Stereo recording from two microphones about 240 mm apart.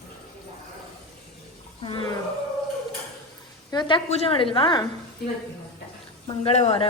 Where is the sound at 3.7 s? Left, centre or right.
Centre.